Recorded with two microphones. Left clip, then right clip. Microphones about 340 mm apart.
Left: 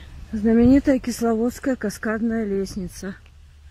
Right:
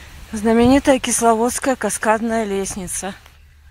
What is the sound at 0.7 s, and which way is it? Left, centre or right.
Speech, right.